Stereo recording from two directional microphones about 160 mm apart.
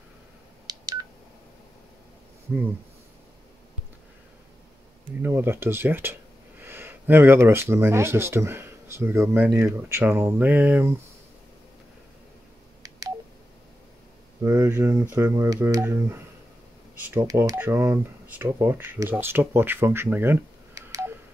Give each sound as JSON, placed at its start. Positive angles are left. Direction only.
{"t": 0.7, "sound": "telephone dialing", "side_deg": -25}
{"t": 5.2, "sound": "speech", "side_deg": -15}
{"t": 14.4, "sound": "speech", "side_deg": -20}
{"t": 17.2, "sound": "speech", "side_deg": -20}